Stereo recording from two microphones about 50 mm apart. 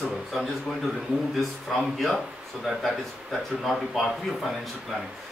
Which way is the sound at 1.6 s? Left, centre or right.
Centre.